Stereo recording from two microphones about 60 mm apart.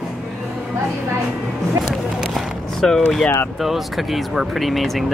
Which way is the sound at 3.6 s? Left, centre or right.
Centre.